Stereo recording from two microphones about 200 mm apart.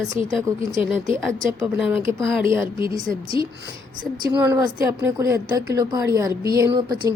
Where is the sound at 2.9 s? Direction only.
20° right (ahead or behind).